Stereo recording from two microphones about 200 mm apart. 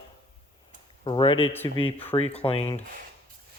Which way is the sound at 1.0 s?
25° left (ahead or behind).